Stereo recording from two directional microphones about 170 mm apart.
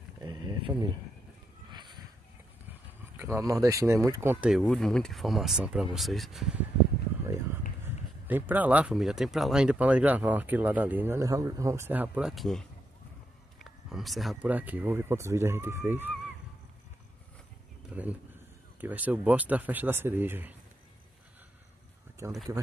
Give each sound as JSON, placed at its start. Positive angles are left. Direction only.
{"t": 0.2, "sound": "speech", "side_deg": -25}
{"t": 1.7, "sound": "a sound", "side_deg": -25}
{"t": 3.2, "sound": "speech", "side_deg": -15}
{"t": 4.5, "sound": "speech", "side_deg": 0}
{"t": 8.3, "sound": "speech", "side_deg": -10}
{"t": 13.7, "sound": "speech", "side_deg": 0}
{"t": 17.9, "sound": "a sound", "side_deg": -10}
{"t": 18.8, "sound": "speech", "side_deg": -10}
{"t": 22.2, "sound": "speech", "side_deg": -20}